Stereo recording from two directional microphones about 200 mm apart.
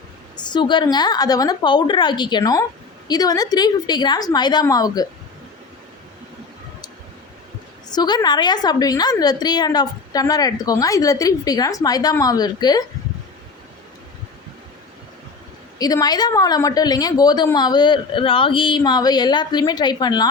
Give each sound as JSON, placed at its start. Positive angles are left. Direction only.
{"t": 0.3, "sound": "a woman's voice", "side_deg": 20}
{"t": 7.9, "sound": "a woman's voice", "side_deg": 20}
{"t": 15.8, "sound": "a woman's voice", "side_deg": 20}